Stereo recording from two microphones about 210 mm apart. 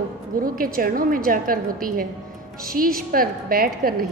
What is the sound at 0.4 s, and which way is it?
A woman's voice, 40° right (ahead or behind).